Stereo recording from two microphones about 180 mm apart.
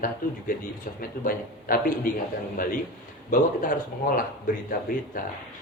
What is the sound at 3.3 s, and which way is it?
Speech, 50° left (ahead or behind).